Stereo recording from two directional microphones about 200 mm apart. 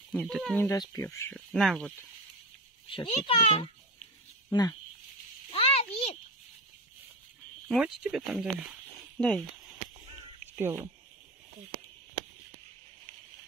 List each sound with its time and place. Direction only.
0.1 s speech: centre (ahead or behind)
0.6 s speech: 15° left (ahead or behind)
1.3 s speech: centre (ahead or behind)
2.9 s a child's voice: 25° left (ahead or behind)
5.5 s a sound: 30° left (ahead or behind)
7.6 s speech: 5° right (ahead or behind)
10.4 s a sound: 10° right (ahead or behind)